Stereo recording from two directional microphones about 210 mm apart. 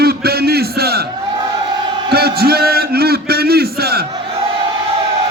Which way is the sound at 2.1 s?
50° right (ahead or behind).